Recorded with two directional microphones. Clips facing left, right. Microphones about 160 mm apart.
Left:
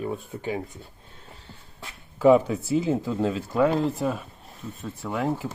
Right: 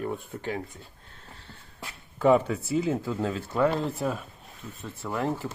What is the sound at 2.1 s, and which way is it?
Speech, 5° left (ahead or behind).